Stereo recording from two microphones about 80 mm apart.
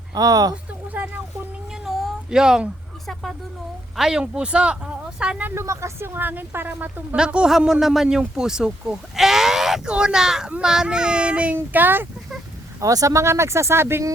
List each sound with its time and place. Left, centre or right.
0.1 s speech: right
0.5 s a sound: right
1.7 s a sound: centre
2.3 s speech: centre
3.9 s speech: centre
5.5 s speech: right
6.1 s a woman's voice: right
7.2 s speech: centre
11.5 s a woman's voice: right
12.8 s speech: right